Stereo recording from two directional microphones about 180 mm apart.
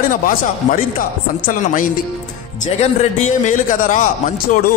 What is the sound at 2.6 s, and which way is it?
A man's voice, 40° left (ahead or behind).